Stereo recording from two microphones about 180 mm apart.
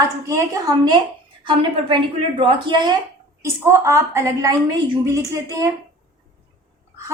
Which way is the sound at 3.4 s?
15° right (ahead or behind).